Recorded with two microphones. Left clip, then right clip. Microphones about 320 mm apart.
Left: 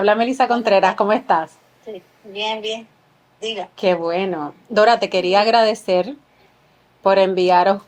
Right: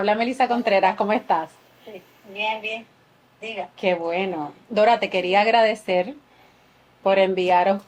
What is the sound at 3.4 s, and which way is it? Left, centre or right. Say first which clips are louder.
Speech: left 5 dB; left.